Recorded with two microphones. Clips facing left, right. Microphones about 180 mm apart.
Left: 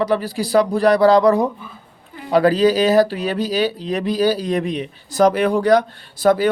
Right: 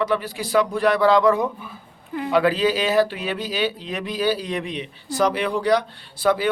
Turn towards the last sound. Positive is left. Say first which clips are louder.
# left 5 dB
turn(degrees=45)  # may be behind; listen again after turning